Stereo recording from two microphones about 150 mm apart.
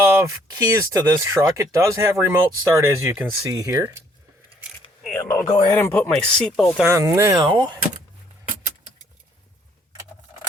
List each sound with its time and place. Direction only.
0.0 s speech: 20° right (ahead or behind)
5.0 s a sound: 5° left (ahead or behind)
5.7 s speech: 10° left (ahead or behind)
6.8 s speech: 20° right (ahead or behind)